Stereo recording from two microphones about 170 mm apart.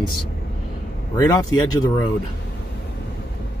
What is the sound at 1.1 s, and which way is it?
Speech, 20° left (ahead or behind).